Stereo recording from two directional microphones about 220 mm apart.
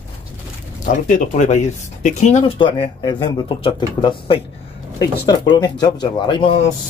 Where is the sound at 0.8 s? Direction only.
35° left (ahead or behind).